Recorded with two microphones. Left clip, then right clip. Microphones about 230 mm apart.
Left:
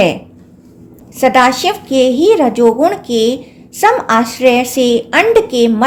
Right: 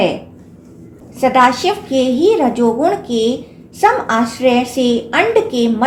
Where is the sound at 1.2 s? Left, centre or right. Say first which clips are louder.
Left 2 dB; left.